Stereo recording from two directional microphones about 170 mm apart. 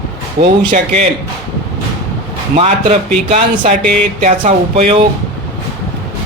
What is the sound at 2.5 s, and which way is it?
Speech, 40° right (ahead or behind).